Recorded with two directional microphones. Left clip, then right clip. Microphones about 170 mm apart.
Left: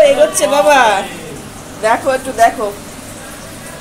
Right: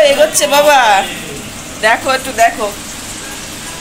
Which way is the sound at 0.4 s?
15° left (ahead or behind).